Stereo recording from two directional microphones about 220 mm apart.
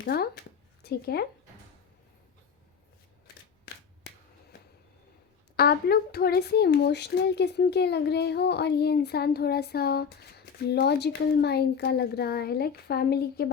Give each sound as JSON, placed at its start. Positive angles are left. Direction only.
{"t": 0.0, "sound": "a sound", "side_deg": 45}
{"t": 0.8, "sound": "speech", "side_deg": 45}
{"t": 5.5, "sound": "speech", "side_deg": 45}